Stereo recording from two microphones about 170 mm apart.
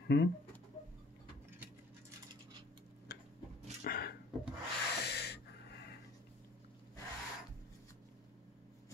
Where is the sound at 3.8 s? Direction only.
60° left (ahead or behind).